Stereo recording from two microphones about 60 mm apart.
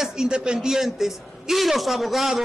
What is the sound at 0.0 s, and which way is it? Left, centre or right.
A man's voice, centre.